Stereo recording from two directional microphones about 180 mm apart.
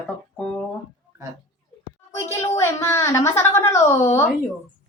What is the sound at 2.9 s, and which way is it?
A child's voice, 15° left (ahead or behind).